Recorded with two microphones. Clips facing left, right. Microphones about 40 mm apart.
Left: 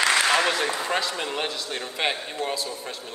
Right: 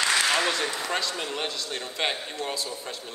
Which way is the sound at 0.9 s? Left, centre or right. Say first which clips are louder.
Left 3 dB; centre.